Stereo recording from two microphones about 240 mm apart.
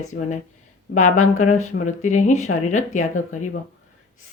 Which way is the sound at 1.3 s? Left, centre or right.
Left.